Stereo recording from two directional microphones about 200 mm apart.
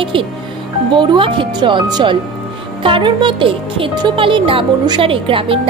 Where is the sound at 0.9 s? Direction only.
25° right (ahead or behind).